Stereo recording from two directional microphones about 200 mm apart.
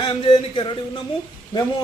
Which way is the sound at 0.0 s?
30° left (ahead or behind).